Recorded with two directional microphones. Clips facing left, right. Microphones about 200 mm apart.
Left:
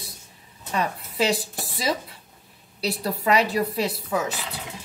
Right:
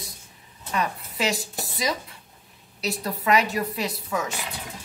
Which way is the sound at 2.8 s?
30° left (ahead or behind).